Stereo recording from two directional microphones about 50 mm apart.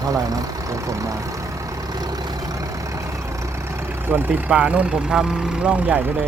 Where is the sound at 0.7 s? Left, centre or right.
Right.